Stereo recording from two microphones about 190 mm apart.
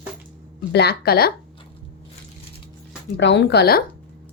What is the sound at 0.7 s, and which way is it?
Speech, 55° left (ahead or behind).